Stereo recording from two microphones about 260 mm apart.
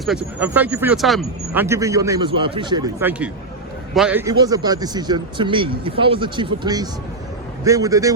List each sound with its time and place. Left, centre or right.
0.0 s a man's voice: centre